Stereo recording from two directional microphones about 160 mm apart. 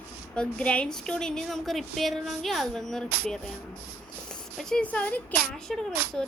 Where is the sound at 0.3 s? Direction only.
5° left (ahead or behind).